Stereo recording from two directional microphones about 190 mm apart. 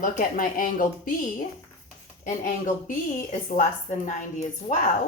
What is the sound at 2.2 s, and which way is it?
Speech, 45° left (ahead or behind).